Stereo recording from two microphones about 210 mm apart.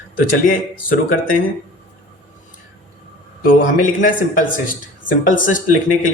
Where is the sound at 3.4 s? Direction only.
40° left (ahead or behind).